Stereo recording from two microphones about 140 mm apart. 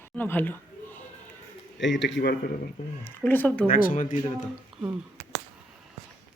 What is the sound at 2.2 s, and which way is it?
Speech, 90° left.